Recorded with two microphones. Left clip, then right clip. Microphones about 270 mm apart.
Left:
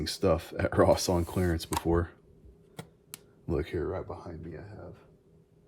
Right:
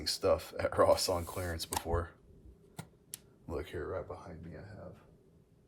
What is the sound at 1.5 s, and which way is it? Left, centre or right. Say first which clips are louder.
Speech: left 5 dB; left.